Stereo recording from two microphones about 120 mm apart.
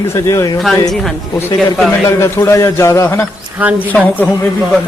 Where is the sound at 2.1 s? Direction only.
20° left (ahead or behind).